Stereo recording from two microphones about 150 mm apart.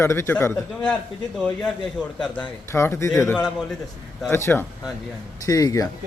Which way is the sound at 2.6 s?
15° left (ahead or behind).